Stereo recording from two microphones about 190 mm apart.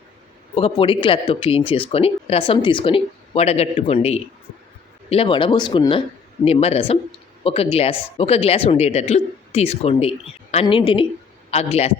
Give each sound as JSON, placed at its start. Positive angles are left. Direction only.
{"t": 0.5, "sound": "speech", "side_deg": 30}